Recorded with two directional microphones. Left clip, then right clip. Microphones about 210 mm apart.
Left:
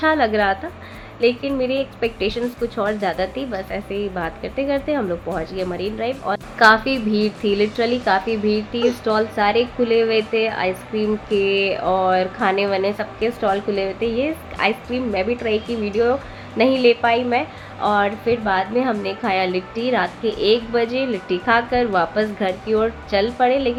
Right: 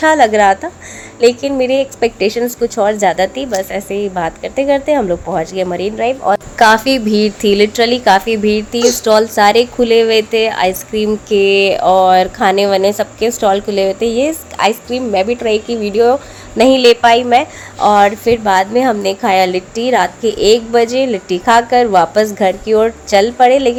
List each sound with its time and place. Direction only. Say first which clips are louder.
0.0 s speech: right 9 dB; 35° right (ahead or behind)